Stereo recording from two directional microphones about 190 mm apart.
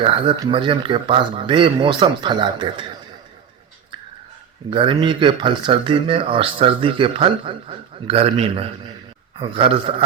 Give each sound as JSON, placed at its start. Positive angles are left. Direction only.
{"t": 0.0, "sound": "speech", "side_deg": -30}
{"t": 4.7, "sound": "speech", "side_deg": -30}